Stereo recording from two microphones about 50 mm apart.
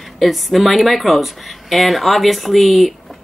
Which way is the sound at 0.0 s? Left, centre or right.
Centre.